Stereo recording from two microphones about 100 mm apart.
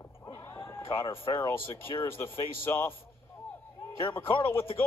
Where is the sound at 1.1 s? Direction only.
25° left (ahead or behind).